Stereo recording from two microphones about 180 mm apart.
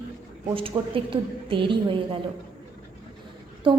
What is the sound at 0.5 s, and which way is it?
A woman's voice, 30° right (ahead or behind).